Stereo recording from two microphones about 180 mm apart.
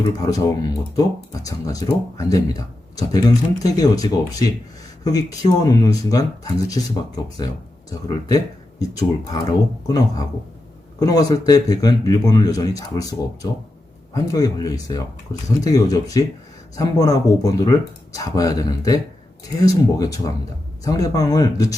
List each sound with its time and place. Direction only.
0.2 s speech: 20° left (ahead or behind)